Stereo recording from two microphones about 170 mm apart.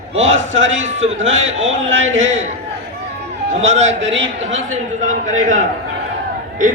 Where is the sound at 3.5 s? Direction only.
40° right (ahead or behind).